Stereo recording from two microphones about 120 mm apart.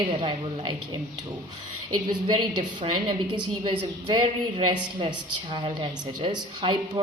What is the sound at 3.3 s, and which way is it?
A woman's voice, 40° right (ahead or behind).